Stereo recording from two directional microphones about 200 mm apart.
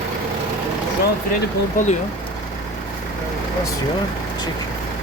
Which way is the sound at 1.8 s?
40° left (ahead or behind).